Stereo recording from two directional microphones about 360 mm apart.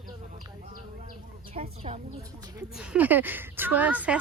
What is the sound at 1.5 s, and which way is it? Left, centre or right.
Speech, centre.